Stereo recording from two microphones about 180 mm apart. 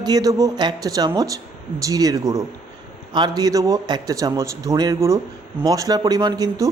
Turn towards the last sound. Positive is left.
turn(degrees=-20)  # may be behind; listen again after turning